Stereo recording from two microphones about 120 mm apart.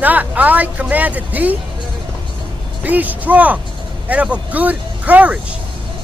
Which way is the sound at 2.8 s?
15° right (ahead or behind).